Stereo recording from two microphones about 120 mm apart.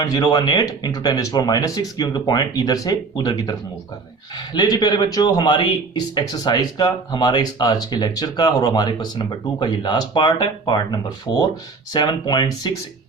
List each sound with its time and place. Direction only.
0.0 s a man's voice: 35° left (ahead or behind)